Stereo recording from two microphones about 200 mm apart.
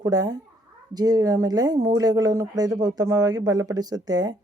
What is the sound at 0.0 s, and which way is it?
Speech, 20° right (ahead or behind).